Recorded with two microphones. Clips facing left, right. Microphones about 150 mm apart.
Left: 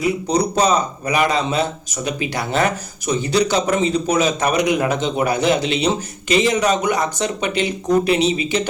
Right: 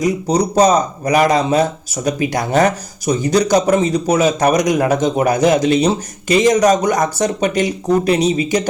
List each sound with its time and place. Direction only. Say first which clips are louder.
0.0 s a man's voice: right 3 dB; 40° right (ahead or behind)